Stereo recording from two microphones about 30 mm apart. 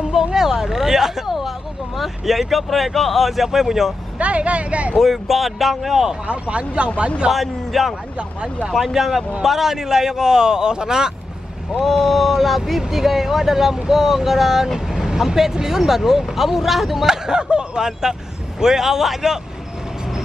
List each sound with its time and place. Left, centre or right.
0.1 s a sound: centre
2.0 s speech: centre
4.2 s speech: right
4.9 s speech: centre
6.2 s speech: right
7.3 s a man's voice: centre; by 11.1 s right
11.8 s speech: centre
17.1 s a man's voice: right
18.6 s speech: centre